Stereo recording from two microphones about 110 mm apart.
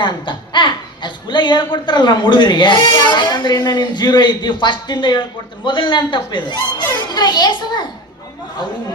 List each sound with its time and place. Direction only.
0.0 s a child's voice: 45° left (ahead or behind)